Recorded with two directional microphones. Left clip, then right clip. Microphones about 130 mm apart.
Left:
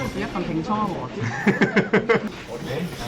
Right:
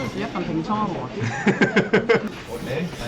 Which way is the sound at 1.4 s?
25° right (ahead or behind).